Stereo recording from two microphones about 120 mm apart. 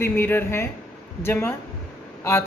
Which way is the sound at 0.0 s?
20° left (ahead or behind).